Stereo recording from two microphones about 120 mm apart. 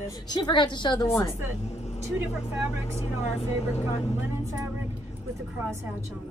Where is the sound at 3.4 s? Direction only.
60° left (ahead or behind).